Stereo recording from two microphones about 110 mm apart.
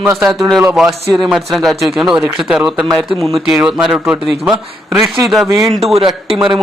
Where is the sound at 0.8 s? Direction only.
Centre (ahead or behind).